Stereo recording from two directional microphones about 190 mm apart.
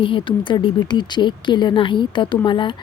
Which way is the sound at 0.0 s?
25° left (ahead or behind).